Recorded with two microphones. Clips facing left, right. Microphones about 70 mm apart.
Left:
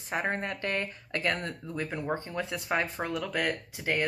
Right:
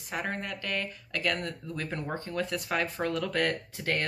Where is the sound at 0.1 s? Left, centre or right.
Left.